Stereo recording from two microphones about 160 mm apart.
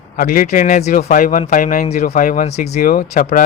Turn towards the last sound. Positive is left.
turn(degrees=50)  # may be behind; listen again after turning